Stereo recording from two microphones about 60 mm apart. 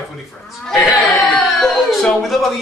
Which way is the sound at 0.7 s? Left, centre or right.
Centre.